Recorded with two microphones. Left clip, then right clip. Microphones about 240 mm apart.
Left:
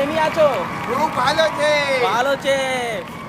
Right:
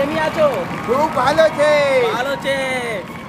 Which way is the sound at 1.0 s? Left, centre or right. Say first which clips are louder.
Right 3 dB; centre.